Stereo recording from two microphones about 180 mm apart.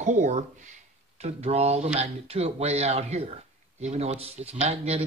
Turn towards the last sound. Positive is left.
turn(degrees=-35)  # may be behind; listen again after turning